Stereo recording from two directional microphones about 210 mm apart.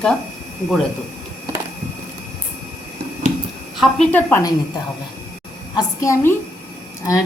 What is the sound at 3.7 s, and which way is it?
Speech, centre (ahead or behind).